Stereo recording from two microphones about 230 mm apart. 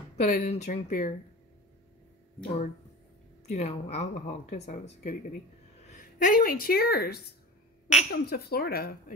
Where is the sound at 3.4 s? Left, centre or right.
Left.